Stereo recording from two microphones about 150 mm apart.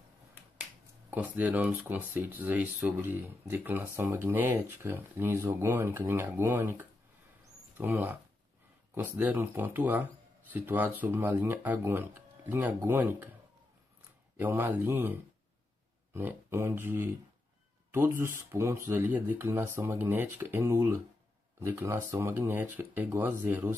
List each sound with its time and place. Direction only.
1.1 s speech: 10° right (ahead or behind)
14.4 s speech: 15° right (ahead or behind)